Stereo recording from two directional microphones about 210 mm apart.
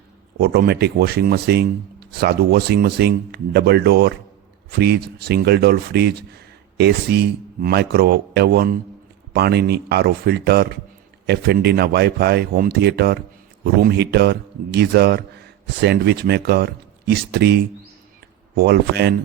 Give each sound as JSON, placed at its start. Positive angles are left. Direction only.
{"t": 0.3, "sound": "speech", "side_deg": -50}